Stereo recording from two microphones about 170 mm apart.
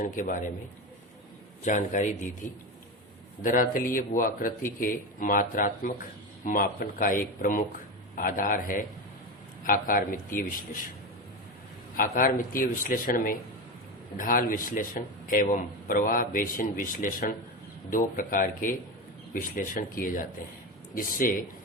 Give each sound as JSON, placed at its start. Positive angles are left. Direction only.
{"t": 0.2, "sound": "a man's voice", "side_deg": 50}
{"t": 1.6, "sound": "a man's voice", "side_deg": 45}
{"t": 3.4, "sound": "a man's voice", "side_deg": 50}
{"t": 11.9, "sound": "a man's voice", "side_deg": 55}